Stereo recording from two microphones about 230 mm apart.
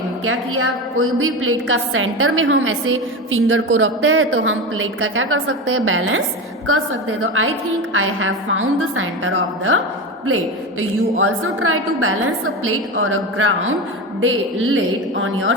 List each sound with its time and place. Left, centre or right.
0.3 s a woman's voice: right